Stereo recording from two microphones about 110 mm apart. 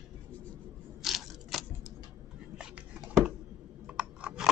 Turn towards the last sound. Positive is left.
turn(degrees=-10)  # may be behind; listen again after turning